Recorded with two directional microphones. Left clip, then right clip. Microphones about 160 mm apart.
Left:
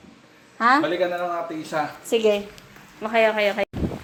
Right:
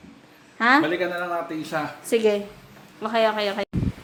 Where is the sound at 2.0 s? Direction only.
5° right (ahead or behind).